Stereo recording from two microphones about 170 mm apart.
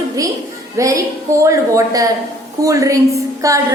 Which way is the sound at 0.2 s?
20° right (ahead or behind).